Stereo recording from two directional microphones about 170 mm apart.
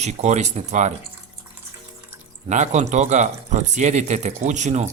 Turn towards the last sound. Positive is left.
turn(degrees=-45)  # may be behind; listen again after turning